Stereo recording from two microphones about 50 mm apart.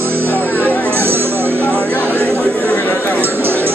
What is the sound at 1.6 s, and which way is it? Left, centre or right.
Chatter, left.